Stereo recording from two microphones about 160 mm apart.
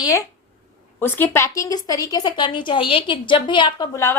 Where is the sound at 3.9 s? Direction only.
20° left (ahead or behind).